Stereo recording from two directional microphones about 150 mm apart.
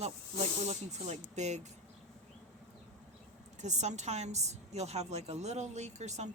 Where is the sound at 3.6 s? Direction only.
50° right (ahead or behind).